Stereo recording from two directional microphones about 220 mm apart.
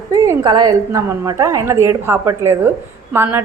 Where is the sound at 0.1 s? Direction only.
15° right (ahead or behind).